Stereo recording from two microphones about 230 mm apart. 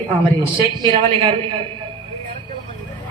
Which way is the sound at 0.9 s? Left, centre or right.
Right.